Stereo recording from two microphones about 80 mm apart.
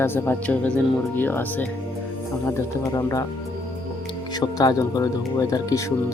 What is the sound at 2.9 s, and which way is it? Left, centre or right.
Speech, left.